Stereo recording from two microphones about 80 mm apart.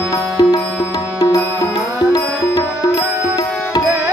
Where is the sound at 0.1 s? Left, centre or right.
Left.